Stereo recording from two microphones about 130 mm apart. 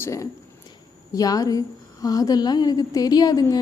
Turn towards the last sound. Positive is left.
turn(degrees=30)  # may be behind; listen again after turning